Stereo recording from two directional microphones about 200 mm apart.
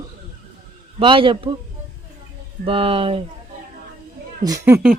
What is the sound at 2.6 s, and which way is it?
Speech, 25° right (ahead or behind).